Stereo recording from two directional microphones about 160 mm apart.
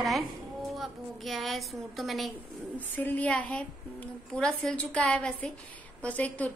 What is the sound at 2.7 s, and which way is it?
Speech, 10° left (ahead or behind).